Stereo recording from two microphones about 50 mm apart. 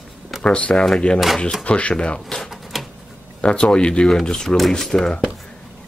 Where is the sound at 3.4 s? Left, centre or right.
Centre.